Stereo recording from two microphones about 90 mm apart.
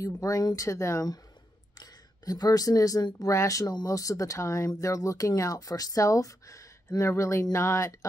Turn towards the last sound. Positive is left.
turn(degrees=35)  # may be behind; listen again after turning